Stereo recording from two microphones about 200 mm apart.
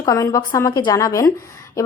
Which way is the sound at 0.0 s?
15° left (ahead or behind).